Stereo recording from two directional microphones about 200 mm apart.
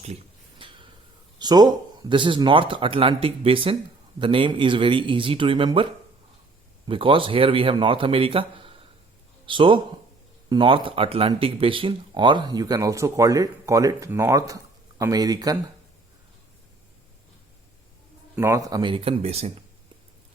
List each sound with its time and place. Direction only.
0.6 s a sound: 25° right (ahead or behind)
1.4 s speech: 20° right (ahead or behind)
18.3 s speech: 15° right (ahead or behind); by 19.5 s 30° right (ahead or behind)